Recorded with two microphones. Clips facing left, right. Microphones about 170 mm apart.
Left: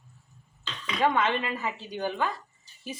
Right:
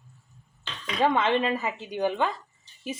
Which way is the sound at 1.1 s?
25° right (ahead or behind).